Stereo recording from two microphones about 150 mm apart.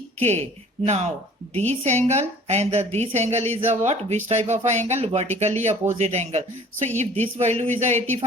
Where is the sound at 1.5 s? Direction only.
45° right (ahead or behind).